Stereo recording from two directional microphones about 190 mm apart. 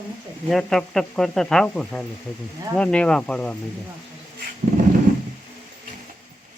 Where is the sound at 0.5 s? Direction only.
Centre (ahead or behind).